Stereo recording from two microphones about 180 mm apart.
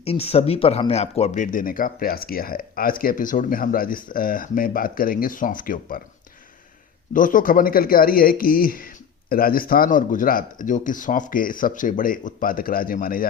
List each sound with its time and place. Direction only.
0.0 s speech: 35° left (ahead or behind); by 6.0 s 50° left (ahead or behind)
7.1 s speech: 50° left (ahead or behind)